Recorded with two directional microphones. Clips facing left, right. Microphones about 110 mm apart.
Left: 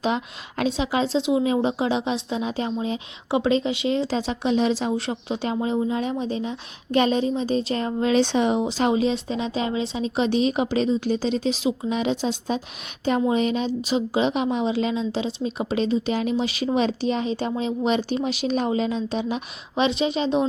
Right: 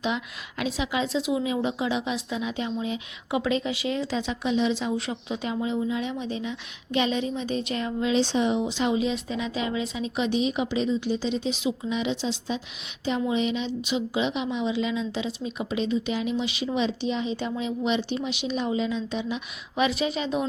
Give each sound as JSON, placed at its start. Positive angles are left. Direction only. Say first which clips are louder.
{"t": 0.0, "sound": "a woman's voice", "louder": "left 4 dB", "side_deg": 40}
{"t": 8.6, "sound": "a woman's voice", "louder": "left 4 dB", "side_deg": 35}